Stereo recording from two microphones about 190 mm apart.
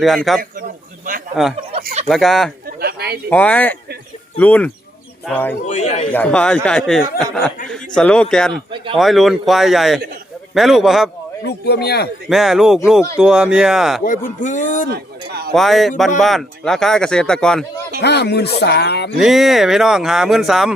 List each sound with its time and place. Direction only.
0.3 s speech: centre (ahead or behind)
1.8 s a sound: 40° right (ahead or behind)
2.0 s speech: centre (ahead or behind)
2.6 s a sound: 55° right (ahead or behind)
3.2 s speech: 10° left (ahead or behind)
5.6 s a man's voice: 35° left (ahead or behind)
6.1 s a man's voice: 5° left (ahead or behind)
11.4 s speech: 60° left (ahead or behind)
12.3 s speech: centre (ahead or behind)
14.4 s a man's voice: 40° left (ahead or behind)
14.8 s a sound: 60° right (ahead or behind)
15.5 s speech: centre (ahead or behind)
18.0 s speech: 60° left (ahead or behind)
19.2 s speech: centre (ahead or behind)